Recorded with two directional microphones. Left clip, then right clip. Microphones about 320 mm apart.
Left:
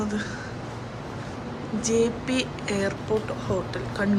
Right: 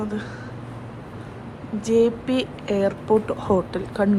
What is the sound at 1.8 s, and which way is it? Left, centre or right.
Speech, centre.